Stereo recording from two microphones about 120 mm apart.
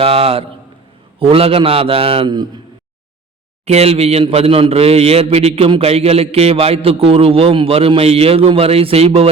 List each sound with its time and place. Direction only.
0.0 s a man's voice: 55° right (ahead or behind)
3.7 s a man's voice: 60° right (ahead or behind)